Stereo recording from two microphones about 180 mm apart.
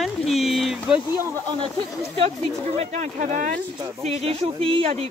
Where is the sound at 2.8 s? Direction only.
40° right (ahead or behind).